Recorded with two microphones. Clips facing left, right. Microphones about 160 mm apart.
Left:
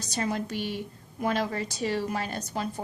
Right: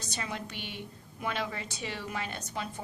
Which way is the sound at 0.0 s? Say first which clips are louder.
Left 8 dB; 40° left (ahead or behind).